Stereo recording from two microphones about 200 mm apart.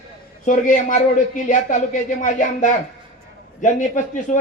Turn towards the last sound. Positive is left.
turn(degrees=40)  # may be behind; listen again after turning